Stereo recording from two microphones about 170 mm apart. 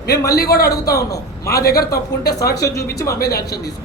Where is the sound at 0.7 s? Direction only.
20° left (ahead or behind).